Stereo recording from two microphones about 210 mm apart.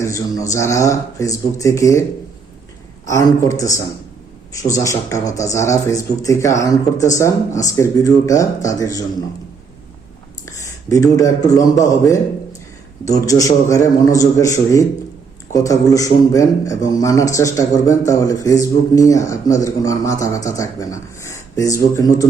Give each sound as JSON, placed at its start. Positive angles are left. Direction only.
{"t": 0.0, "sound": "speech", "side_deg": 15}
{"t": 3.1, "sound": "speech", "side_deg": 15}
{"t": 10.4, "sound": "speech", "side_deg": 15}
{"t": 13.1, "sound": "speech", "side_deg": 15}